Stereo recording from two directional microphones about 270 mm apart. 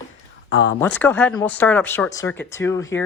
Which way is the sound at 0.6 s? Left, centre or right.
Centre.